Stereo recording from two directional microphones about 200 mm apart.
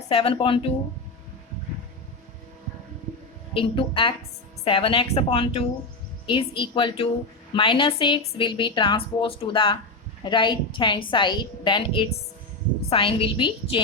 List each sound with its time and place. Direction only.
0.1 s a woman's voice: 25° left (ahead or behind)
3.5 s a woman's voice: 25° left (ahead or behind)